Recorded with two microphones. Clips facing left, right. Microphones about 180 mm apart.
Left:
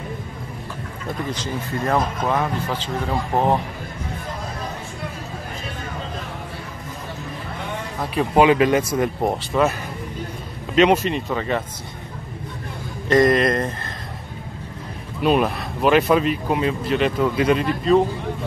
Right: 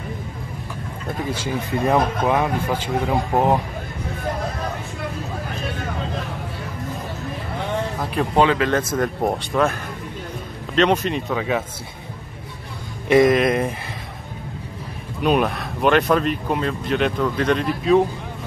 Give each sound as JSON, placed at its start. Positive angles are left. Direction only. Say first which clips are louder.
{"t": 1.4, "sound": "speech", "louder": "right 3 dB", "side_deg": -15}
{"t": 8.0, "sound": "speech", "louder": "left 3 dB", "side_deg": 0}
{"t": 8.5, "sound": "speech", "louder": "left 3 dB", "side_deg": 15}
{"t": 13.1, "sound": "speech", "louder": "right 1 dB", "side_deg": -5}
{"t": 15.2, "sound": "speech", "louder": "left 1 dB", "side_deg": 0}